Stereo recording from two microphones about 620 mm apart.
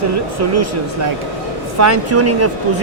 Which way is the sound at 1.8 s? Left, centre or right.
Right.